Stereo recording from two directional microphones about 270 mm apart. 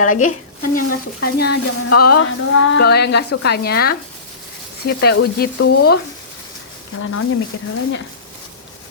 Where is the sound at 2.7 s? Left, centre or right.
Left.